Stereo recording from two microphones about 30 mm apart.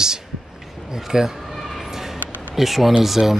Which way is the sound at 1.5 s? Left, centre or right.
Centre.